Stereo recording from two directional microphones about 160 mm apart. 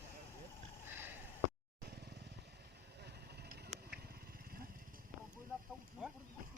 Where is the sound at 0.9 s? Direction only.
10° right (ahead or behind).